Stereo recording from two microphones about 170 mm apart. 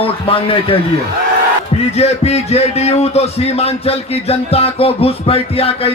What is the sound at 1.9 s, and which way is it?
Speech, 40° left (ahead or behind).